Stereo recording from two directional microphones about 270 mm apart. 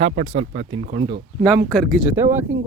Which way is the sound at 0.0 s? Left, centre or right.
Right.